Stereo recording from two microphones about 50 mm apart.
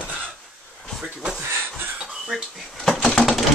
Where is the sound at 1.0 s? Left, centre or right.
Centre.